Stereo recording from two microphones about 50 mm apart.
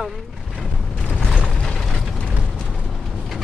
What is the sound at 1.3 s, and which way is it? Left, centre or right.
Mechanisms, centre.